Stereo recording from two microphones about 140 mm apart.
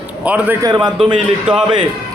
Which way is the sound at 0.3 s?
10° right (ahead or behind).